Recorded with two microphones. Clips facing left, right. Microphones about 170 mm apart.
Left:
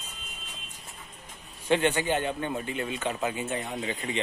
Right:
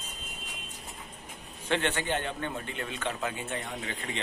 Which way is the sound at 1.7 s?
10° left (ahead or behind).